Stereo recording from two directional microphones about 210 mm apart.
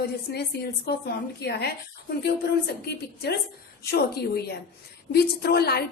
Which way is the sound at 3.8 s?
50° left (ahead or behind).